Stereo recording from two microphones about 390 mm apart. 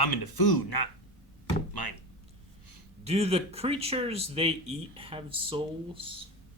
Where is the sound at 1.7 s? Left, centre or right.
Left.